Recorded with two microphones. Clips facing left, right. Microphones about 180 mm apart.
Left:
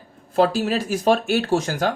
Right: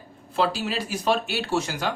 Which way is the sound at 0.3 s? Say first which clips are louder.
Left 6 dB; 45° left (ahead or behind).